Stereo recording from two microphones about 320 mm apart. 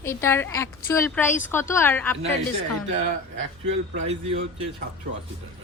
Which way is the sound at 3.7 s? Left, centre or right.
Centre.